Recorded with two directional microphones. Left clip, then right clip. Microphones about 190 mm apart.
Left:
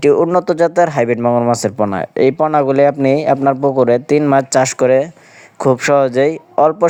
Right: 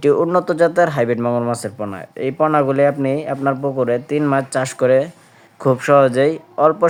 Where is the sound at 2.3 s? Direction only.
30° left (ahead or behind).